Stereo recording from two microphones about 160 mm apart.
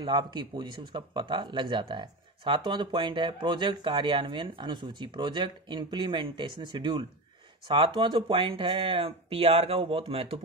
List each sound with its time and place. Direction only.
0.0 s speech: 30° right (ahead or behind)